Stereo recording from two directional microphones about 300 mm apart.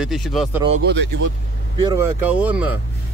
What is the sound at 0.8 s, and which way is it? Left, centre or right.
Speech, right.